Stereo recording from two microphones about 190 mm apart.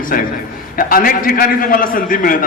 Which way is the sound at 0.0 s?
45° left (ahead or behind).